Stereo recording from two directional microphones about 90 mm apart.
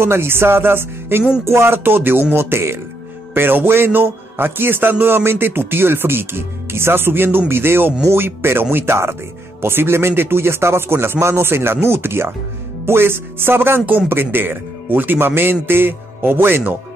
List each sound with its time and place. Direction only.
0.0 s a man's voice: 25° right (ahead or behind)